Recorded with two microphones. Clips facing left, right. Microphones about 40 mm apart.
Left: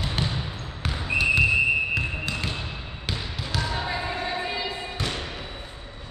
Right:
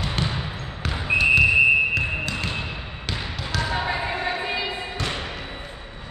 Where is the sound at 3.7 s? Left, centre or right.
Right.